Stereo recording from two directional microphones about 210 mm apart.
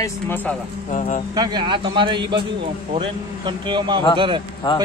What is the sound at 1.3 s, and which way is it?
A man's voice, 20° right (ahead or behind).